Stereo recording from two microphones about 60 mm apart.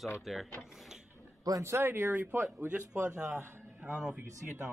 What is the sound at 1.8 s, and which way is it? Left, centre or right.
Speech, right.